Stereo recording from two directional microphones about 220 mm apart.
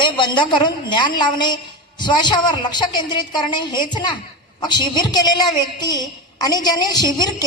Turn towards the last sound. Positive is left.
turn(degrees=20)  # may be behind; listen again after turning